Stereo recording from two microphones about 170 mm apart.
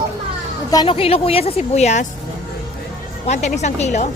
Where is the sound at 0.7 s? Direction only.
30° left (ahead or behind).